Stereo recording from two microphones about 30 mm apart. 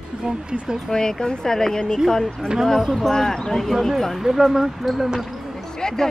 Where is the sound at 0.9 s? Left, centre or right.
Left.